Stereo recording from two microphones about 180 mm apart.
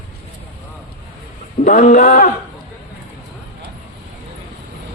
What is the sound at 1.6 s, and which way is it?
Speech, 45° left (ahead or behind).